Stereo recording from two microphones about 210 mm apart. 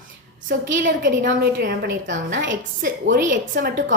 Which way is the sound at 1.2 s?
45° right (ahead or behind).